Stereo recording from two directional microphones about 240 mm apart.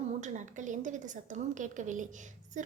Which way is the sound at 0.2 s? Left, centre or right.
Right.